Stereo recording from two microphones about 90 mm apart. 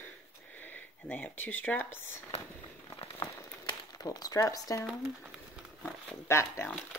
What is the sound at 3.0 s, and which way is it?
Crumpling, 75° left (ahead or behind).